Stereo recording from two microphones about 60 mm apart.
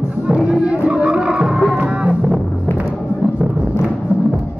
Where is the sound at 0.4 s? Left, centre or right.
Centre.